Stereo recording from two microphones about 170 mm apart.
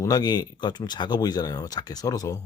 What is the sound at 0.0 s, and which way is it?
Speech, 25° left (ahead or behind).